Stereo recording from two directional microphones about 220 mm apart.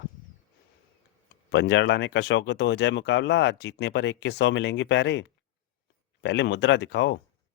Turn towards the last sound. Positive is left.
turn(degrees=55)  # may be behind; listen again after turning